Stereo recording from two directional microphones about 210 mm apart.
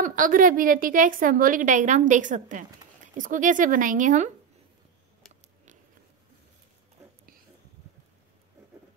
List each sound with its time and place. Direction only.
0.0 s a woman's voice: 40° right (ahead or behind)